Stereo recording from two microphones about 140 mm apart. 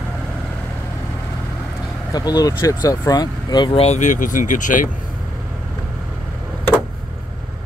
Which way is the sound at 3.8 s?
60° left (ahead or behind).